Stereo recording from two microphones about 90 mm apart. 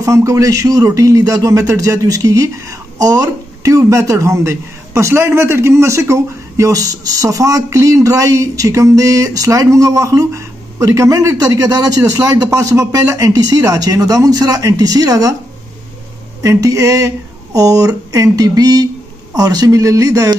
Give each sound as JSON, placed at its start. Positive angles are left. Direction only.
{"t": 0.0, "sound": "speech", "side_deg": -35}
{"t": 16.4, "sound": "speech", "side_deg": -35}